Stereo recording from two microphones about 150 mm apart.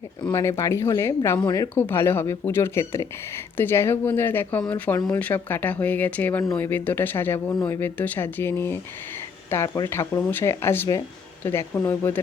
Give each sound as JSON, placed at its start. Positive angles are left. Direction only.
{"t": 0.3, "sound": "speech", "side_deg": 15}